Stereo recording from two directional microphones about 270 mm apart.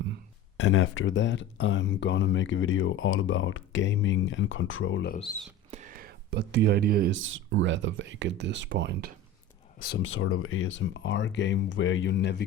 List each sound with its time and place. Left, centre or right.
0.5 s speech: left
5.7 s speech: right
9.7 s speech: left